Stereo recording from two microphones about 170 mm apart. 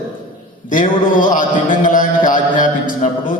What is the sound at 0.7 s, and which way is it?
Mantra, 50° left (ahead or behind).